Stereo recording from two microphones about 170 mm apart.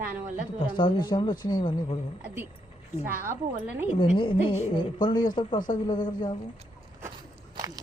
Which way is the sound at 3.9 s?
30° left (ahead or behind).